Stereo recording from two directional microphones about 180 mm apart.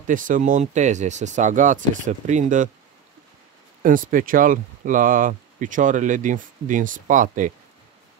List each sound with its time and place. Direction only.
0.0 s speech: 45° right (ahead or behind)
3.8 s speech: 50° right (ahead or behind)